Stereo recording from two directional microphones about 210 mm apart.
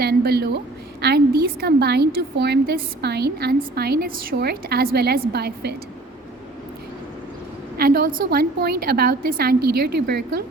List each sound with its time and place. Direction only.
0.0 s a woman's voice: 50° right (ahead or behind)
7.8 s a woman's voice: 45° right (ahead or behind)